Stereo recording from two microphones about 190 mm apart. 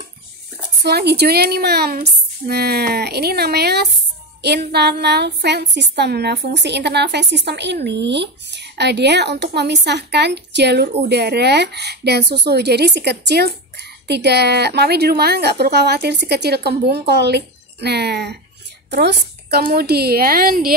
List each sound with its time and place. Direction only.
0.8 s speech: 60° right (ahead or behind)